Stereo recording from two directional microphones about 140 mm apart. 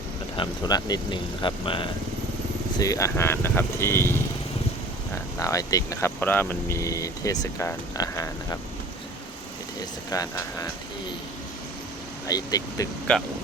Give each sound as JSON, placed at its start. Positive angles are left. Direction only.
{"t": 0.3, "sound": "speech", "side_deg": 30}
{"t": 2.7, "sound": "speech", "side_deg": 25}
{"t": 10.1, "sound": "speech", "side_deg": 25}
{"t": 12.3, "sound": "speech", "side_deg": 25}
{"t": 13.1, "sound": "speech", "side_deg": 10}